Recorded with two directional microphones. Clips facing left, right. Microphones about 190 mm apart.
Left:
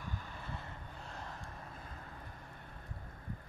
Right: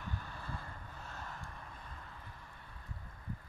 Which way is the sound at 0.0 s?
15° left (ahead or behind).